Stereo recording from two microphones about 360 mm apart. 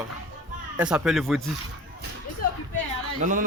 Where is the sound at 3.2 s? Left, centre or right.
Right.